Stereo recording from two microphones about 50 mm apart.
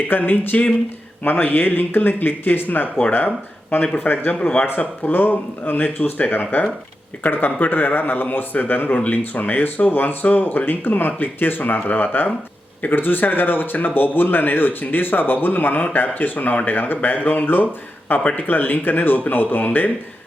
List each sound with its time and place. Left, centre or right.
0.1 s speech: left